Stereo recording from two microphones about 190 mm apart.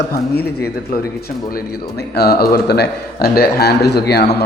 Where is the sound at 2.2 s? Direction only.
55° left (ahead or behind).